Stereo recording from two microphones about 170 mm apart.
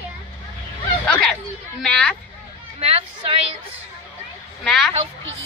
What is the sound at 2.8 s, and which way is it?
Speech, 35° right (ahead or behind).